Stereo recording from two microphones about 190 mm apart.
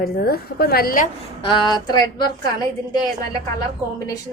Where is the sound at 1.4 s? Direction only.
25° left (ahead or behind).